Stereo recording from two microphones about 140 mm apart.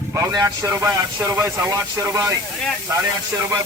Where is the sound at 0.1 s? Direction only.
25° right (ahead or behind).